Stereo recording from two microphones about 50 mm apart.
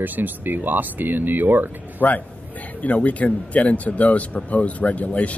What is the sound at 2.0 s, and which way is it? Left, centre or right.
A man's voice, left.